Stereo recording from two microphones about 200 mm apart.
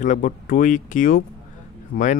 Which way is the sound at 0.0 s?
40° left (ahead or behind).